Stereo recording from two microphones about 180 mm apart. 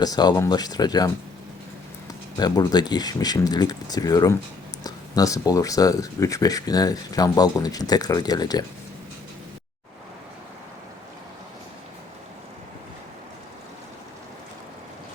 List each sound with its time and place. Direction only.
0.0 s speech: 20° left (ahead or behind)
2.4 s speech: 20° left (ahead or behind)